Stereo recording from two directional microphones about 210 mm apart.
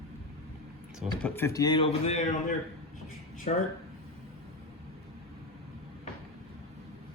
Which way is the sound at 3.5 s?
35° left (ahead or behind).